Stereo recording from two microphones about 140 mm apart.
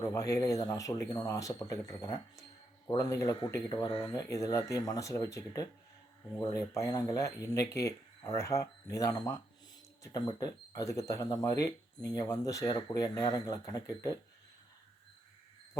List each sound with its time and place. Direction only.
0.0 s speech: 25° left (ahead or behind)